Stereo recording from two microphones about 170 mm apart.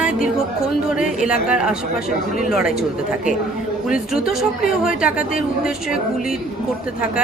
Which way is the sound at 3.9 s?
5° right (ahead or behind).